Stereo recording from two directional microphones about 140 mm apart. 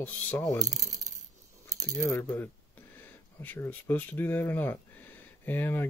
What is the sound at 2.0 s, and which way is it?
Speech, 20° left (ahead or behind).